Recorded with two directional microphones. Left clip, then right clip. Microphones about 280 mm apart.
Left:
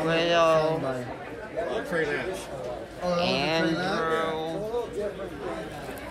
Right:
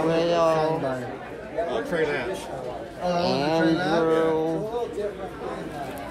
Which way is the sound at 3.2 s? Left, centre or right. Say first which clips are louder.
Right 3 dB; centre.